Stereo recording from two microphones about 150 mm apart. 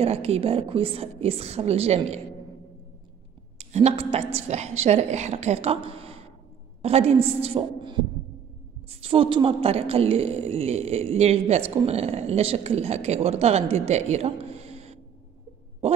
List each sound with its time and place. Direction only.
0.0 s a woman's voice: 45° right (ahead or behind)
3.5 s a woman's voice: 45° right (ahead or behind)